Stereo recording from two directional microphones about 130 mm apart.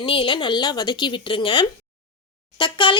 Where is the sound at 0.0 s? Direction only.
40° left (ahead or behind).